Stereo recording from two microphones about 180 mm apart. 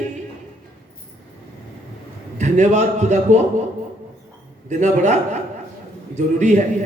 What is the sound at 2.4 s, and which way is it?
Speech, 40° right (ahead or behind).